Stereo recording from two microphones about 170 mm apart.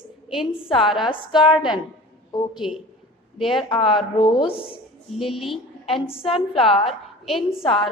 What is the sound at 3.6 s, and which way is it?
Speech, 30° left (ahead or behind).